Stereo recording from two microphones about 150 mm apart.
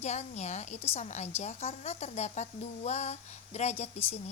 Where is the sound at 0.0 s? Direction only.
50° left (ahead or behind).